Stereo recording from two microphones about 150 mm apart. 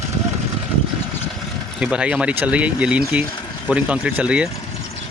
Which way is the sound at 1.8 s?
5° right (ahead or behind).